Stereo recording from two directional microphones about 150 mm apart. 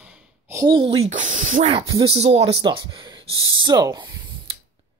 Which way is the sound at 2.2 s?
45° right (ahead or behind).